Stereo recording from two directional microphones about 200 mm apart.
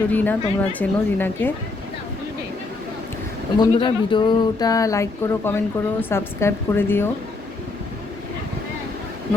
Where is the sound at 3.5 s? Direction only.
25° left (ahead or behind).